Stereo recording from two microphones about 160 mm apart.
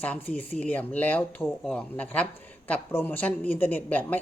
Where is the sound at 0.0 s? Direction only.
10° left (ahead or behind).